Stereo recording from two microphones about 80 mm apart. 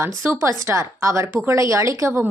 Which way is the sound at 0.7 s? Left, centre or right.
Right.